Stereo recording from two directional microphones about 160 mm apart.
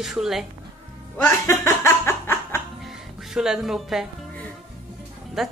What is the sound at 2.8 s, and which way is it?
Music, 5° right (ahead or behind).